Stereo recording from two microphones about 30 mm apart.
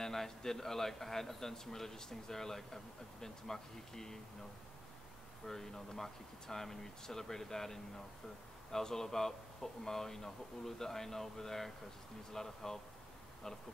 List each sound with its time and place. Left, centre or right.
0.0 s a man's voice: centre
5.5 s a man's voice: centre